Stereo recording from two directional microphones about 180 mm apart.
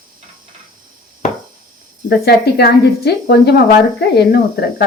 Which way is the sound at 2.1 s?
60° left (ahead or behind).